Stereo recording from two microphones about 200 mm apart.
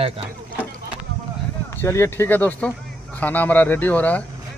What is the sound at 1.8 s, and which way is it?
Speech, 15° left (ahead or behind).